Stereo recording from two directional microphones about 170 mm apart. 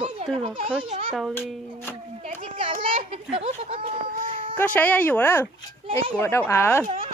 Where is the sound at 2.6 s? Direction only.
30° right (ahead or behind).